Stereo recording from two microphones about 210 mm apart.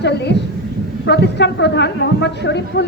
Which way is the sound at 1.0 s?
55° left (ahead or behind).